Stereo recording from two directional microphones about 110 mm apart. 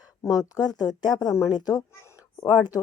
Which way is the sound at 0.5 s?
35° left (ahead or behind).